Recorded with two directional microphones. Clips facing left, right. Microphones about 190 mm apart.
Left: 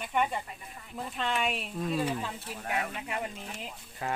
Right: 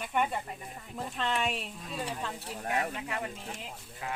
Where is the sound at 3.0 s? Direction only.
15° left (ahead or behind).